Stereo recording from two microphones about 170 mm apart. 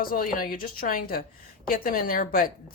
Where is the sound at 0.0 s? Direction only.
60° left (ahead or behind).